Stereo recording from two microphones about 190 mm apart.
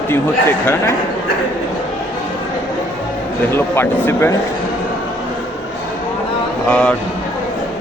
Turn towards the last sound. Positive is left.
turn(degrees=5)  # may be behind; listen again after turning